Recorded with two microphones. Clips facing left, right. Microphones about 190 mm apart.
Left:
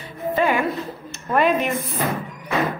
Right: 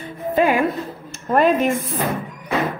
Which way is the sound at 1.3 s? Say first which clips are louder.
Right 3 dB; 35° right (ahead or behind).